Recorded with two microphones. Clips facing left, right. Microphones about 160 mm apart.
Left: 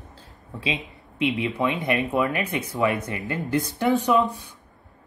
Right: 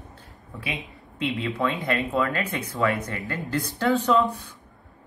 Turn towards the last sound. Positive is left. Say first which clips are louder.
# left 1 dB
turn(degrees=15)  # may be behind; listen again after turning